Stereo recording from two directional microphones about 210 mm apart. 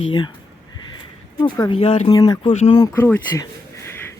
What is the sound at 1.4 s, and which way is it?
Speech, 20° left (ahead or behind).